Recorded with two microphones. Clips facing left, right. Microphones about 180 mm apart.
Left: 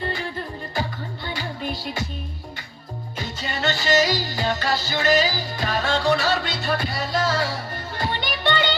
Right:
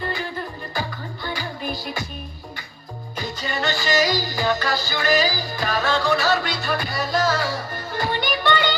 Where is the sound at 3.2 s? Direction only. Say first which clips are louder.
Right 2 dB; 25° left (ahead or behind).